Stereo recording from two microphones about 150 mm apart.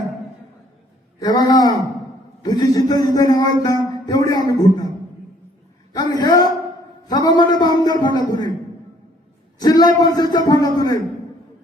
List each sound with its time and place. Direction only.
1.2 s a man's voice: 25° left (ahead or behind)
5.9 s a sound: 25° left (ahead or behind)
9.6 s a man's voice: 25° left (ahead or behind)